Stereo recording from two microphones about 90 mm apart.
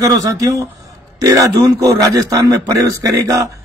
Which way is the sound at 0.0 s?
40° right (ahead or behind).